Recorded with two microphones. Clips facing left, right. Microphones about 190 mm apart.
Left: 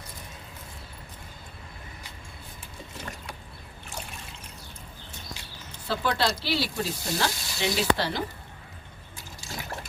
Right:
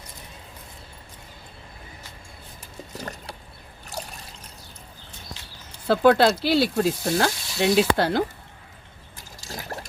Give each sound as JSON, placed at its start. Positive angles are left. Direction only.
{"t": 3.0, "sound": "a sound", "side_deg": -40}
{"t": 3.8, "sound": "trickle", "side_deg": -35}
{"t": 5.9, "sound": "sizzle", "side_deg": -55}